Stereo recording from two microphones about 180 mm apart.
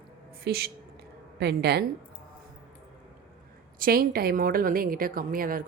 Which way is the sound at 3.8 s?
55° right (ahead or behind).